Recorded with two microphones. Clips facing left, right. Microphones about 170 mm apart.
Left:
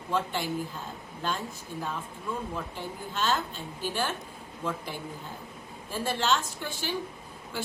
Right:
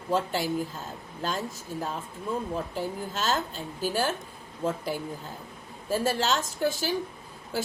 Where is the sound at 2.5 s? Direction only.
40° right (ahead or behind).